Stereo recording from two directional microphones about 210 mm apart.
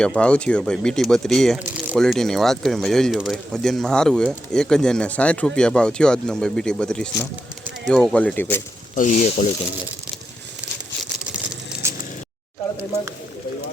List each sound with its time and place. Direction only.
0.0 s speech: 5° left (ahead or behind)
9.0 s speech: 35° left (ahead or behind)
11.7 s a sound: 10° right (ahead or behind)